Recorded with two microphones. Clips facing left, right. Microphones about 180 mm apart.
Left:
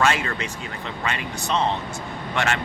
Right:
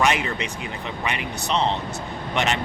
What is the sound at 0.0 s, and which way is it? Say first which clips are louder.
Speech: even; 15° right (ahead or behind).